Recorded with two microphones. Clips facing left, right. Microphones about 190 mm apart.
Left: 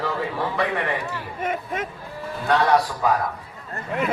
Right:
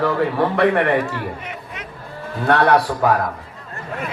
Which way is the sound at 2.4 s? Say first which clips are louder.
Right 4 dB; 60° right (ahead or behind).